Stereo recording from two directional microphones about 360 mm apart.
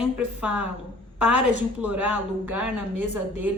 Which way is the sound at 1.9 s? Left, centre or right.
Right.